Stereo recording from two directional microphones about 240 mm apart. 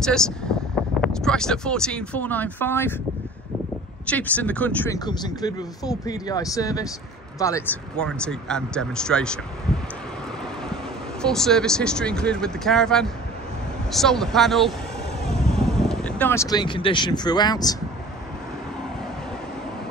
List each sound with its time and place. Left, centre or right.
0.0 s speech: centre
4.0 s speech: centre
11.2 s speech: centre